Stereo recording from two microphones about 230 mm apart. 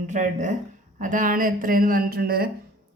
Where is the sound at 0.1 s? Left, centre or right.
Right.